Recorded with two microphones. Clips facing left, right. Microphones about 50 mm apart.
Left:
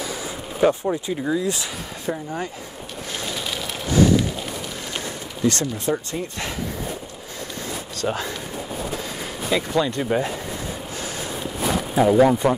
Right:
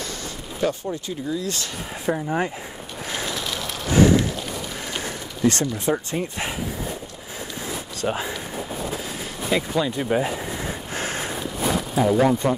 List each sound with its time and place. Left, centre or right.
0.6 s speech: centre
2.0 s speech: right
3.3 s a sound: centre
3.9 s a sound: right
5.6 s speech: right
8.0 s speech: centre
9.5 s speech: centre
11.0 s snort: right
11.9 s speech: centre